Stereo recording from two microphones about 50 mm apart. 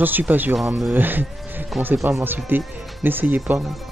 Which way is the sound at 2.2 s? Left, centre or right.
Right.